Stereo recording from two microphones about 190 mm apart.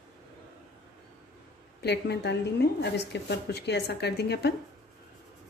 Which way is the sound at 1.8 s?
60° left (ahead or behind).